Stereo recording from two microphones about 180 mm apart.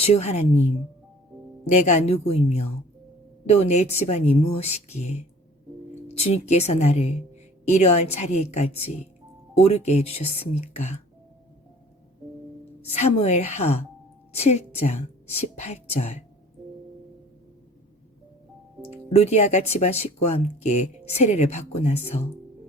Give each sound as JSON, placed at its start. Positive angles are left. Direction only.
{"t": 0.0, "sound": "speech", "side_deg": 35}
{"t": 12.8, "sound": "speech", "side_deg": 35}
{"t": 18.8, "sound": "speech", "side_deg": 35}